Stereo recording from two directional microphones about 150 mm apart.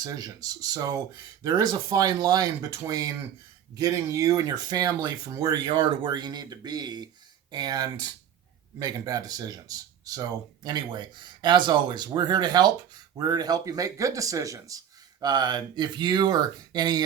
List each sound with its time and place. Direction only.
0.0 s speech: 25° right (ahead or behind)